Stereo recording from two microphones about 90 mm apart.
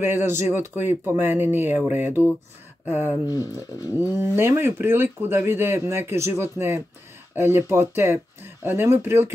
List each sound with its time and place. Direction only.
0.0 s speech: 25° right (ahead or behind)
3.3 s speech: 40° left (ahead or behind)
4.0 s speech: 25° right (ahead or behind)